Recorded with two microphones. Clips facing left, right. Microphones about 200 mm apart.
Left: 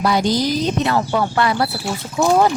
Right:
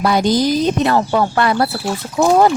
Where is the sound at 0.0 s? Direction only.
50° right (ahead or behind).